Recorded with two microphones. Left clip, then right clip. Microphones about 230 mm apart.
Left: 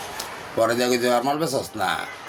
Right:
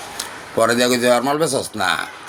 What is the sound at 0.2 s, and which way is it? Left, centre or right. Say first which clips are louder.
A man's voice: right 4 dB; right.